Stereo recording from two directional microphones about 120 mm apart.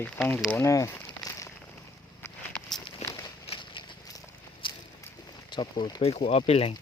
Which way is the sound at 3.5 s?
45° left (ahead or behind).